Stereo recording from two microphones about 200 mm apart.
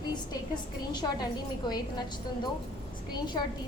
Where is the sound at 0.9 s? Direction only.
20° left (ahead or behind).